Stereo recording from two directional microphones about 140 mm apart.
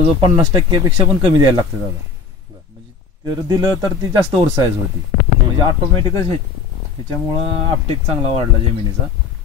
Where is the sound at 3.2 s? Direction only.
30° right (ahead or behind).